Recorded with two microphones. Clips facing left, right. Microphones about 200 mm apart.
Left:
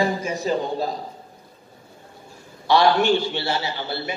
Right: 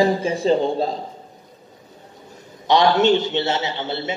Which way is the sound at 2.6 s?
20° right (ahead or behind).